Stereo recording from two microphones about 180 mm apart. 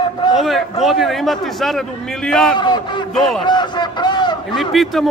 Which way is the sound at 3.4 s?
25° left (ahead or behind).